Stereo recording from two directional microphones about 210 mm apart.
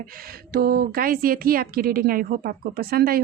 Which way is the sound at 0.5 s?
45° right (ahead or behind).